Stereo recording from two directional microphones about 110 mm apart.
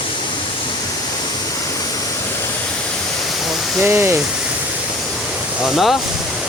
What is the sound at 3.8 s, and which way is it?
Speech, 20° right (ahead or behind).